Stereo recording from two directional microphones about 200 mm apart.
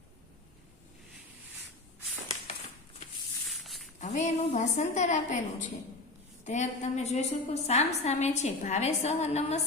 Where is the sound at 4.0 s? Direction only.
40° left (ahead or behind).